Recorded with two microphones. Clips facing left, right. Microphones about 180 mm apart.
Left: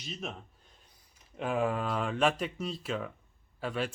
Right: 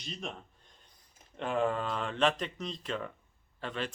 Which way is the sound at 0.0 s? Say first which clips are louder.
Left 1 dB; 5° left (ahead or behind).